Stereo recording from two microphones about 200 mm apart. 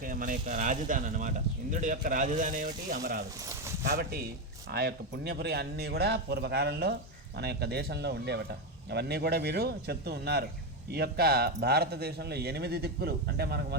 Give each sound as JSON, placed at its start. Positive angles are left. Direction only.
{"t": 0.0, "sound": "speech", "side_deg": -45}
{"t": 3.3, "sound": "a sound", "side_deg": -15}
{"t": 3.8, "sound": "a man's voice", "side_deg": -50}